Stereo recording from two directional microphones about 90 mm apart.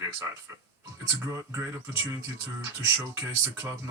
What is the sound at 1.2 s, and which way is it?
Speech, 30° right (ahead or behind).